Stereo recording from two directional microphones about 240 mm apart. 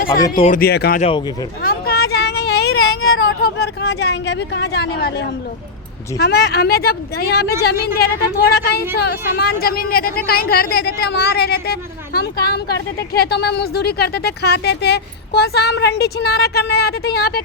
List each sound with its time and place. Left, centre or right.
0.2 s speech: left
0.5 s speech: left
1.6 s a sound: left
6.1 s speech: left